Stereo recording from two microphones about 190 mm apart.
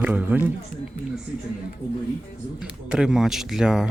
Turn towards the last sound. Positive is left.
turn(degrees=-5)  # may be behind; listen again after turning